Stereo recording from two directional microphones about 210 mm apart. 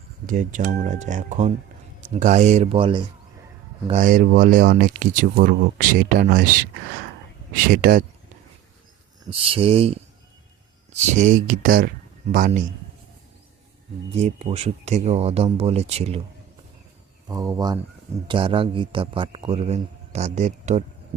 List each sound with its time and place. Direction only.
0.3 s speech: 40° right (ahead or behind); by 3.1 s 25° right (ahead or behind)
3.8 s speech: 35° right (ahead or behind)
9.2 s a man's voice: 25° right (ahead or behind)
14.1 s a man's voice: 30° right (ahead or behind)
17.2 s a man's voice: 15° right (ahead or behind); by 20.8 s 35° right (ahead or behind)